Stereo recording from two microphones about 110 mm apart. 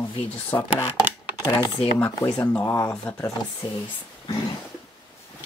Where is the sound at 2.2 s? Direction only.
30° left (ahead or behind).